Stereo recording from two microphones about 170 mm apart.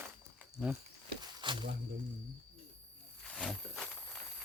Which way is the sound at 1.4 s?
30° right (ahead or behind).